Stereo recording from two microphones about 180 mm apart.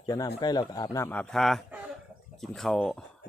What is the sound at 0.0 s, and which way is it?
A man's voice, 20° left (ahead or behind).